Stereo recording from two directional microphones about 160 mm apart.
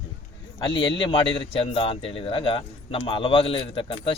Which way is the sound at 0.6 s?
30° left (ahead or behind).